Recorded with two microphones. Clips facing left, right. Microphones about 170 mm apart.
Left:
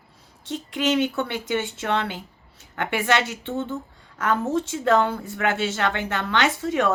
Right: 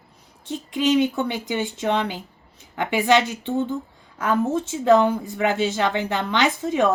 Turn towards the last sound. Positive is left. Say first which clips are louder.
# right 2 dB
turn(degrees=-15)  # may be behind; listen again after turning